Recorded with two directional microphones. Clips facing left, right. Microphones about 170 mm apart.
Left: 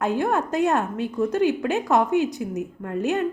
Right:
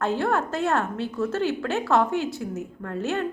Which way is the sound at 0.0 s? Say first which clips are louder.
Left 1 dB; 15° left (ahead or behind).